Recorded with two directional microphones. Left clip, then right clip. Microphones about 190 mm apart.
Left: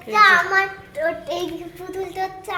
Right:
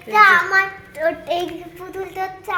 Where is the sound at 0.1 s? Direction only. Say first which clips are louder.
Right 2 dB; 45° right (ahead or behind).